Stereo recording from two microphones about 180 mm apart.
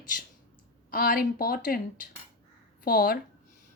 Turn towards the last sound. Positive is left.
turn(degrees=55)  # may be behind; listen again after turning